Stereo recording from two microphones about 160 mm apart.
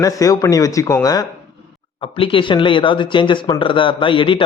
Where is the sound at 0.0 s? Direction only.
20° left (ahead or behind).